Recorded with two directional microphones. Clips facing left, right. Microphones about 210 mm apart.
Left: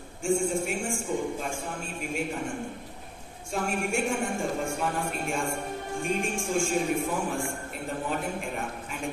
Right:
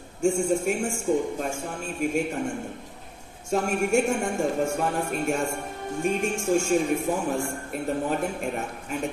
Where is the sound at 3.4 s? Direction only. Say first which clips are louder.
Right 5 dB; 40° right (ahead or behind).